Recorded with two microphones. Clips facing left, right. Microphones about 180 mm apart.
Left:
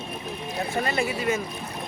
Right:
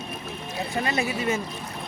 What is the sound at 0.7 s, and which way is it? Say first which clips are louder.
Speech: even; 20° right (ahead or behind).